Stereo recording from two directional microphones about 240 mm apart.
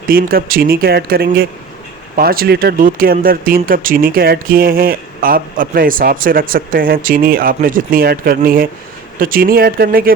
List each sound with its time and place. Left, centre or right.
0.1 s speech: right